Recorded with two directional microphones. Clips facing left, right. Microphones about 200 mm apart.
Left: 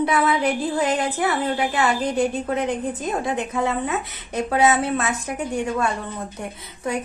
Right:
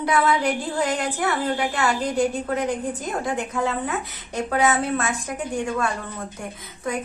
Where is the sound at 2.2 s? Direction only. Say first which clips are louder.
Left 1 dB; 20° left (ahead or behind).